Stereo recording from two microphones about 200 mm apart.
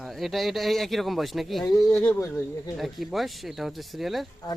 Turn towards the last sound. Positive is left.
turn(degrees=0)  # may be behind; listen again after turning